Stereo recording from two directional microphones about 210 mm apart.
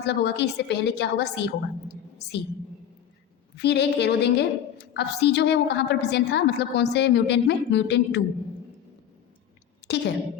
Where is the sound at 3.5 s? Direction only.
55° left (ahead or behind).